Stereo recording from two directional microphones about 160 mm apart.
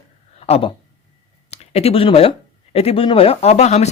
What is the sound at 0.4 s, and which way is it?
Speech, 40° left (ahead or behind).